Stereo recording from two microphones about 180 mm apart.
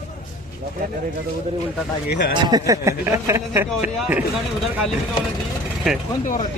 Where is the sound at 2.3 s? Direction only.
20° right (ahead or behind); by 4.2 s 5° right (ahead or behind).